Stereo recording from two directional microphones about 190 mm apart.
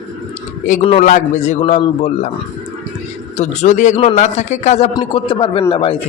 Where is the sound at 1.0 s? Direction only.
40° left (ahead or behind).